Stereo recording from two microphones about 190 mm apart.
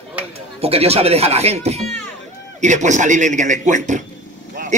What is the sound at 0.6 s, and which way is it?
Speech, 30° right (ahead or behind).